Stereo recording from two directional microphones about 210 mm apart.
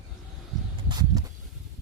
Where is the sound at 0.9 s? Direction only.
20° right (ahead or behind).